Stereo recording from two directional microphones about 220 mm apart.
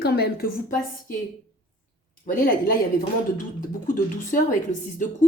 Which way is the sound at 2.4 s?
40° left (ahead or behind).